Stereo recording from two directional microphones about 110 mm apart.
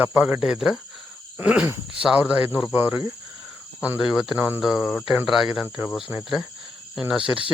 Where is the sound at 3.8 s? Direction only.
10° right (ahead or behind).